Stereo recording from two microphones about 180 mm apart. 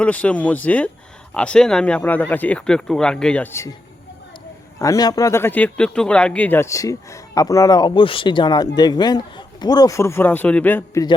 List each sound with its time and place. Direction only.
0.0 s speech: 5° left (ahead or behind)
4.8 s speech: 20° left (ahead or behind)